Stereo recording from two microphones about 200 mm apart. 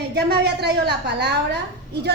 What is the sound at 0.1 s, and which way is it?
A woman's voice, 55° right (ahead or behind).